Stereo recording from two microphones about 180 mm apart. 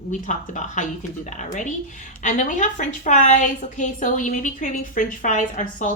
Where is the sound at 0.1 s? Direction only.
45° left (ahead or behind).